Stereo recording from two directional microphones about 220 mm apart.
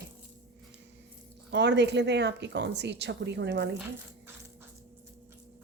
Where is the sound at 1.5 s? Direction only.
50° right (ahead or behind).